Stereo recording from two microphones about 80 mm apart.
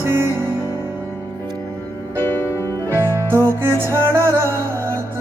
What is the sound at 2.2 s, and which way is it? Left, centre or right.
Music, left.